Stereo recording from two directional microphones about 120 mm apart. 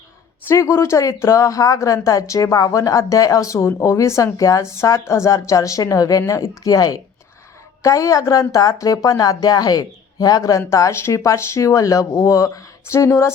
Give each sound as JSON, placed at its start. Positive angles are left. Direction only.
{"t": 0.4, "sound": "speech", "side_deg": 25}